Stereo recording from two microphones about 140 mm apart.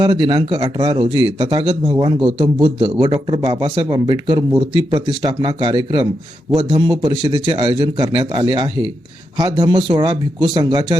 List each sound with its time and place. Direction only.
0.0 s a man's voice: 30° right (ahead or behind)
3.1 s a man's voice: 45° right (ahead or behind); by 10.9 s 30° right (ahead or behind)